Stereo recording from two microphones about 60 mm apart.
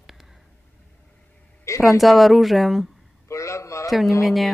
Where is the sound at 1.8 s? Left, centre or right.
Centre.